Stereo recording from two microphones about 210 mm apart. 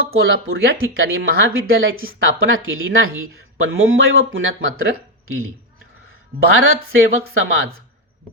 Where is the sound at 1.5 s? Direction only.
75° right (ahead or behind).